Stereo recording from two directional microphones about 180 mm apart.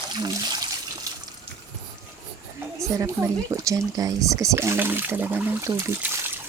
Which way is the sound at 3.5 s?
20° right (ahead or behind).